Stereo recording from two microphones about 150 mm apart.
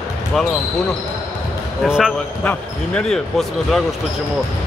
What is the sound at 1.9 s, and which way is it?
Speech, 5° right (ahead or behind).